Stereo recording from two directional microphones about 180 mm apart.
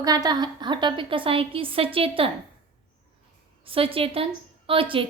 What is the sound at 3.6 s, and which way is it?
A woman's voice, 30° right (ahead or behind).